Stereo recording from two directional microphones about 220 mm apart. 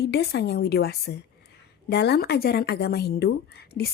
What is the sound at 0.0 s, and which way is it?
A woman's voice, 45° left (ahead or behind).